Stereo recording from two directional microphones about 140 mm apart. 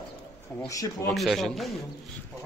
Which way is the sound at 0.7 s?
25° left (ahead or behind).